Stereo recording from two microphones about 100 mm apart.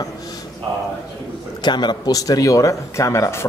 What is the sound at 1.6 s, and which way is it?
Speech, 50° left (ahead or behind).